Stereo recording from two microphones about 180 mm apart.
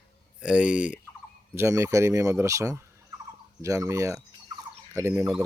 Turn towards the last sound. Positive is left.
turn(degrees=-15)  # may be behind; listen again after turning